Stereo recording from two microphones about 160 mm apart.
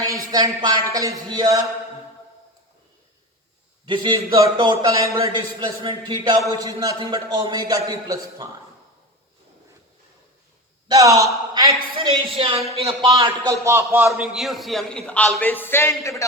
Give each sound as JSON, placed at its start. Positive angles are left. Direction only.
{"t": 0.0, "sound": "speech", "side_deg": -20}
{"t": 3.8, "sound": "a man's voice", "side_deg": -30}
{"t": 4.3, "sound": "speech", "side_deg": -20}
{"t": 10.8, "sound": "a man's voice", "side_deg": -20}
{"t": 12.4, "sound": "a man's voice", "side_deg": -35}
{"t": 13.1, "sound": "speech", "side_deg": -20}
{"t": 14.1, "sound": "a man's voice", "side_deg": 0}